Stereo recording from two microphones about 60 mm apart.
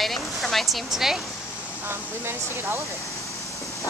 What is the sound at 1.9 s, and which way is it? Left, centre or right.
Speech, right.